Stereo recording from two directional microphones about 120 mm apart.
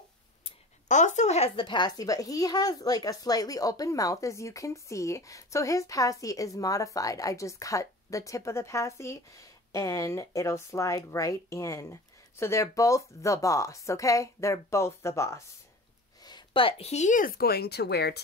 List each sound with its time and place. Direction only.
0.8 s a sound: 90° left; by 1.5 s 70° left (ahead or behind)
1.6 s speech: 40° left (ahead or behind); by 15.4 s 25° left (ahead or behind)
16.3 s a woman's voice: 40° left (ahead or behind); by 17.2 s 70° left (ahead or behind)